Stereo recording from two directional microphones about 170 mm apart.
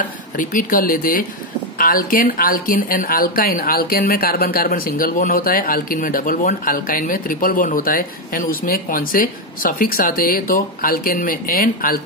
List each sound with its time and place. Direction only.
0.4 s speech: 50° left (ahead or behind)